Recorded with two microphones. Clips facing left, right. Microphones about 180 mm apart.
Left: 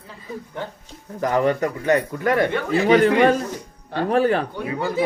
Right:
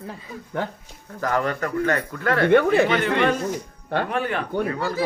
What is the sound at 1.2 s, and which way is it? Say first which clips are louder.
A man's voice: left 4 dB; 15° left (ahead or behind).